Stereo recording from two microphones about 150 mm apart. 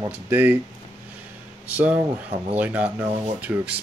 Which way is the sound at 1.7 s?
10° right (ahead or behind).